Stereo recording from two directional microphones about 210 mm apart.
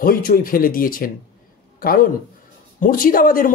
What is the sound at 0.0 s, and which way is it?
A woman's voice, 40° left (ahead or behind).